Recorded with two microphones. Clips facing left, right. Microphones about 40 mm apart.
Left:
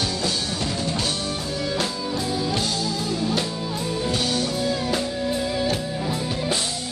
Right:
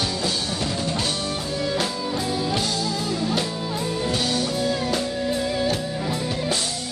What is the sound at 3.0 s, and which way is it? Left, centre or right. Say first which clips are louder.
Music: left 1 dB; centre.